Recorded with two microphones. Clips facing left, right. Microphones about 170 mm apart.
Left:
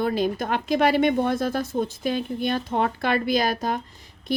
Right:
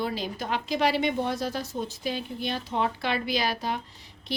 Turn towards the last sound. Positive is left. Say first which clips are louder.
# left 7 dB
turn(degrees=50)  # may be behind; listen again after turning